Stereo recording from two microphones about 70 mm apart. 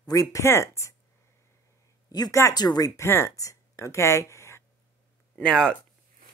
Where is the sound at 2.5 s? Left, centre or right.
Left.